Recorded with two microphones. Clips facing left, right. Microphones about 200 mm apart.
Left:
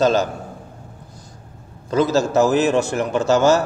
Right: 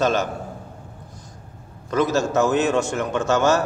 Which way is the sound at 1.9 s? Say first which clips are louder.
Left 3 dB; 35° left (ahead or behind).